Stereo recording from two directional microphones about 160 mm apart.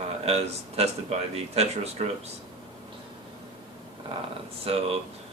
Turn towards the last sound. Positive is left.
turn(degrees=-40)  # may be behind; listen again after turning